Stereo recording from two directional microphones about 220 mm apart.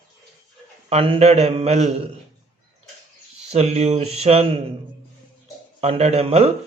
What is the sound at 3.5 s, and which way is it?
Speech, 30° right (ahead or behind).